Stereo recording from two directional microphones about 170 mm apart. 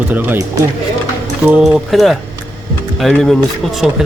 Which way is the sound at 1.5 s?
5° right (ahead or behind).